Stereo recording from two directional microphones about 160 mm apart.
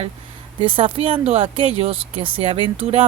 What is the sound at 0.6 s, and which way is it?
Speech, 30° right (ahead or behind).